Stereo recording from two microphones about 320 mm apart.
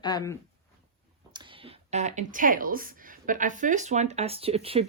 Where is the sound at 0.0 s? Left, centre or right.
Centre.